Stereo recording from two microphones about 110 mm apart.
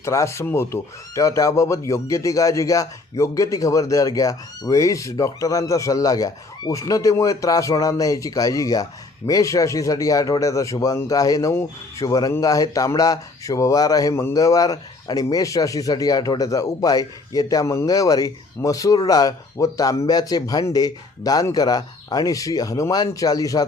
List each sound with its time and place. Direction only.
0.0 s speech: 25° left (ahead or behind)